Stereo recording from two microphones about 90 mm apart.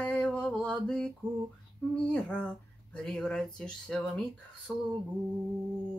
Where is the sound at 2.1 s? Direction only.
15° left (ahead or behind).